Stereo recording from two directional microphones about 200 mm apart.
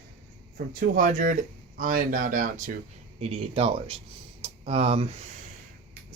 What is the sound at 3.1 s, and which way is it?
Speech, 30° right (ahead or behind).